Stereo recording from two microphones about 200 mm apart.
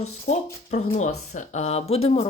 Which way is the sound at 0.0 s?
35° left (ahead or behind).